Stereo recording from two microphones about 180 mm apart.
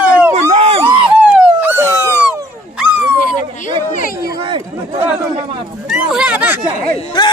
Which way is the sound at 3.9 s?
50° left (ahead or behind).